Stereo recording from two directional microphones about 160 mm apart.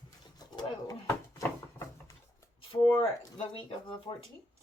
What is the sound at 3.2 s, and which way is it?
Speech, 30° left (ahead or behind).